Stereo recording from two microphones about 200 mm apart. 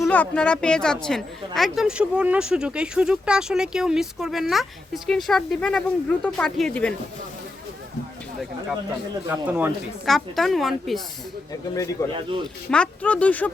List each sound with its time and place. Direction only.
0.0 s a woman's voice: 5° left (ahead or behind)
9.3 s a woman's voice: 10° right (ahead or behind)
11.7 s speech: 15° left (ahead or behind)
12.7 s speech: 5° left (ahead or behind)